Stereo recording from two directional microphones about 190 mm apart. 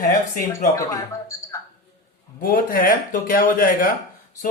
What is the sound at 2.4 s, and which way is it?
Speech, 50° left (ahead or behind).